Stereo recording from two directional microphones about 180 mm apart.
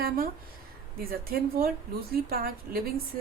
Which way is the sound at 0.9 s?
55° right (ahead or behind).